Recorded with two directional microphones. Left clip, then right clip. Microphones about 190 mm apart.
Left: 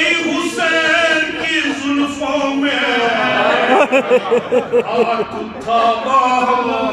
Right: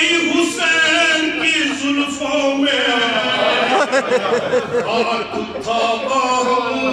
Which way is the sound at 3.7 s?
15° left (ahead or behind).